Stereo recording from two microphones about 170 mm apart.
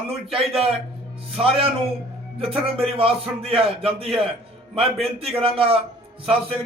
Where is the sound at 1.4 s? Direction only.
35° right (ahead or behind).